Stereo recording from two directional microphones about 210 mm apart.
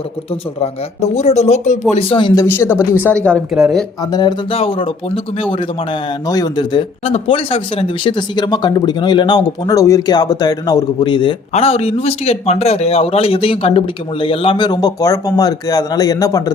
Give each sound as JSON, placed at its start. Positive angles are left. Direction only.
{"t": 0.6, "sound": "speech", "side_deg": 30}
{"t": 3.2, "sound": "speech", "side_deg": 0}
{"t": 4.0, "sound": "speech", "side_deg": 20}